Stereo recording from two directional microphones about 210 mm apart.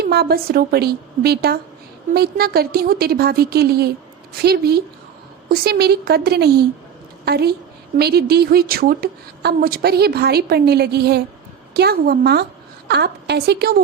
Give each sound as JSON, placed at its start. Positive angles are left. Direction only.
{"t": 0.0, "sound": "a woman's voice", "side_deg": -50}